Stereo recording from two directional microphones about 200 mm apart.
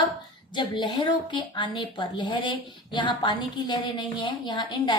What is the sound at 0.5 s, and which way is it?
A woman's voice, 25° left (ahead or behind).